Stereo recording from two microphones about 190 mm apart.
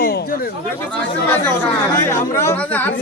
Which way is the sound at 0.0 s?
50° left (ahead or behind).